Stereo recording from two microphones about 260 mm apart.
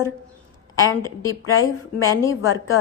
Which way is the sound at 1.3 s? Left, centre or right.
Left.